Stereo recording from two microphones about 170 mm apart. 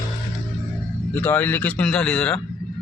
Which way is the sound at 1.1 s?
10° left (ahead or behind).